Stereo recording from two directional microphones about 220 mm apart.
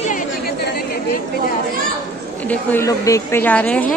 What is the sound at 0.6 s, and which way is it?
Chatter, 45° left (ahead or behind).